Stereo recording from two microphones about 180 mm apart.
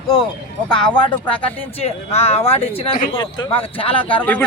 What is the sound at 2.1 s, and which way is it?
A man's voice, 35° left (ahead or behind).